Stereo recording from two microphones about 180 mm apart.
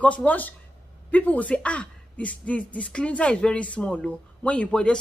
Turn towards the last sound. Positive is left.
turn(degrees=5)  # may be behind; listen again after turning